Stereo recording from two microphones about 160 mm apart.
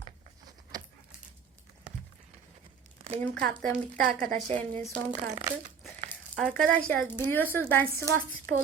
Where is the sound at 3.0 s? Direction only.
50° right (ahead or behind).